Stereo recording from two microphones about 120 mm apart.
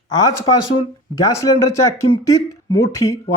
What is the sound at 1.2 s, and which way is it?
Speech, 25° left (ahead or behind).